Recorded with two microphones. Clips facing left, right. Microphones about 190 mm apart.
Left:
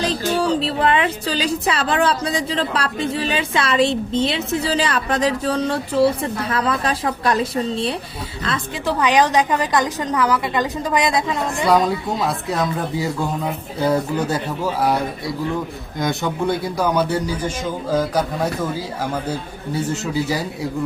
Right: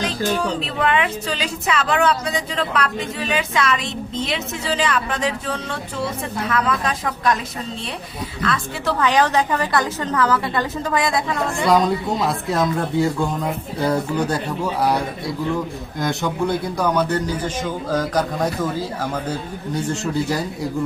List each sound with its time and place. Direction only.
0.0 s a woman's voice: 35° left (ahead or behind)
8.9 s a man's voice: 15° left (ahead or behind)
11.6 s a man's voice: centre (ahead or behind)